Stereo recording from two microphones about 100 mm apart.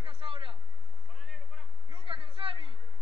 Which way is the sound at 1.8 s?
60° right (ahead or behind).